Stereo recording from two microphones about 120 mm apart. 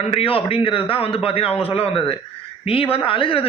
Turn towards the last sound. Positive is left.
turn(degrees=50)  # may be behind; listen again after turning